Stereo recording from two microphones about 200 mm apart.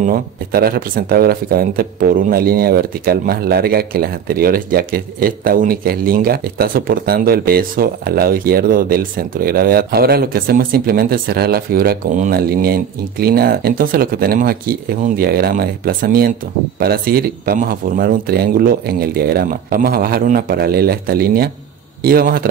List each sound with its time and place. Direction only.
0.0 s speech: 45° right (ahead or behind)